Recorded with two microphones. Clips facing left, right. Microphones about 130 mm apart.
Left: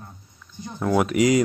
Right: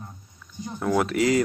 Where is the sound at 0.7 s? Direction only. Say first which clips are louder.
Left 3 dB; 5° left (ahead or behind).